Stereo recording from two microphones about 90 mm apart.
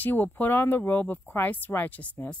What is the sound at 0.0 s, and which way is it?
A woman's voice, 20° left (ahead or behind).